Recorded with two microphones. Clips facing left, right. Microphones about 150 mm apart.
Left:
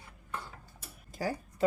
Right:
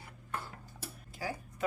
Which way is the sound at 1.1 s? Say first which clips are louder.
Left 5 dB; 40° left (ahead or behind).